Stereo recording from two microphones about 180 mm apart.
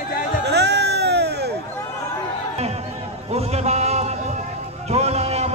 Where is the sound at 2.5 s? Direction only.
35° right (ahead or behind).